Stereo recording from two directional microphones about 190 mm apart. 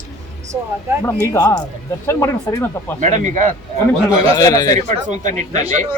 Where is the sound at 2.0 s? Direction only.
15° left (ahead or behind).